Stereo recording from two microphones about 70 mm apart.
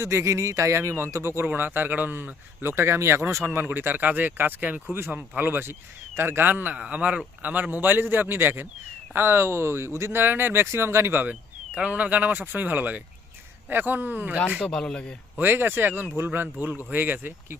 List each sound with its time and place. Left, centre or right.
0.0 s speech: right
1.5 s speech: right
14.6 s speech: centre
15.4 s speech: right